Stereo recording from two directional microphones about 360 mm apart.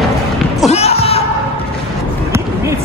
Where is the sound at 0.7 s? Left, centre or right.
Centre.